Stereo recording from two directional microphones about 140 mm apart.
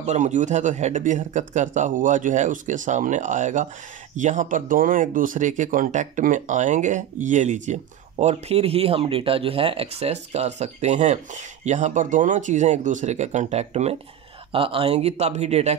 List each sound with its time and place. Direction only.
0.0 s speech: 55° right (ahead or behind)
14.5 s speech: 40° right (ahead or behind)